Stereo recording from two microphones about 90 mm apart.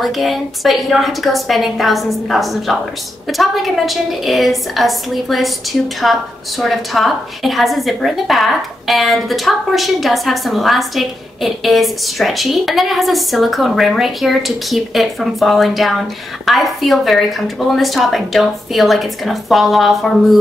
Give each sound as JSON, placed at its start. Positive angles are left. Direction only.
{"t": 0.0, "sound": "a woman's voice", "side_deg": 0}